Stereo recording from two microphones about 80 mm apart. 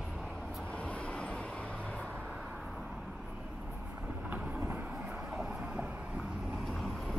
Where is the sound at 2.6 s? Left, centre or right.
Centre.